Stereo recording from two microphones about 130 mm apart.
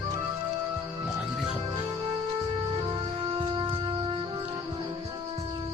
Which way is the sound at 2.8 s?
40° right (ahead or behind).